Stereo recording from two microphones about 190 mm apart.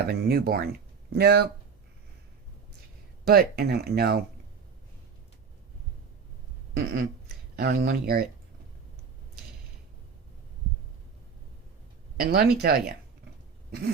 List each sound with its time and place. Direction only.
0.1 s speech: 55° right (ahead or behind)
3.2 s speech: 55° right (ahead or behind)
6.7 s a sound: 55° right (ahead or behind)
7.5 s speech: 55° right (ahead or behind)
12.2 s speech: 55° right (ahead or behind)
13.7 s a sound: 55° right (ahead or behind)